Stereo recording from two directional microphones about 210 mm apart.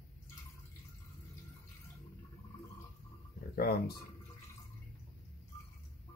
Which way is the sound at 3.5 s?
50° left (ahead or behind).